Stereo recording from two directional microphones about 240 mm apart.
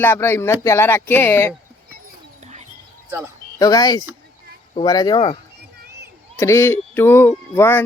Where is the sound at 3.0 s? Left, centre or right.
Centre.